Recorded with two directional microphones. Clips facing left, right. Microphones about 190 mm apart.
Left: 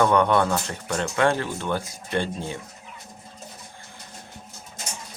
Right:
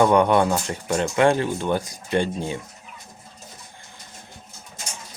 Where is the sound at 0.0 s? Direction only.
15° right (ahead or behind).